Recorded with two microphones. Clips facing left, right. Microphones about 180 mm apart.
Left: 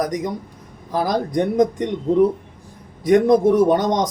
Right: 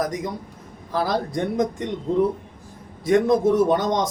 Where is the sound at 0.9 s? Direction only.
15° left (ahead or behind).